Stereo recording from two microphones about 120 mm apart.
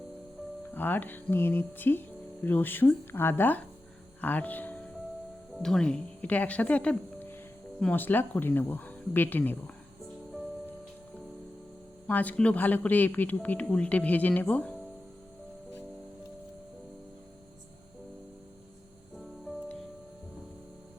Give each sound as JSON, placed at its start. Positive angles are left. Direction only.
{"t": 0.7, "sound": "speech", "side_deg": 15}
{"t": 5.5, "sound": "speech", "side_deg": 5}
{"t": 12.0, "sound": "speech", "side_deg": 15}